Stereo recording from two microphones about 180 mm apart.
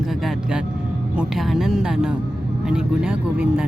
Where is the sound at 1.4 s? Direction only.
Centre (ahead or behind).